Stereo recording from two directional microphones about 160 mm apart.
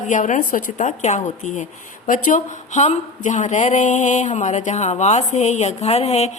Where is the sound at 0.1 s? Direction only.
50° left (ahead or behind).